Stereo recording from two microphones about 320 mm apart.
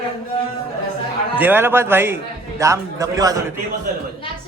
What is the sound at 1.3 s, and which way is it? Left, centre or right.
A man's voice, centre.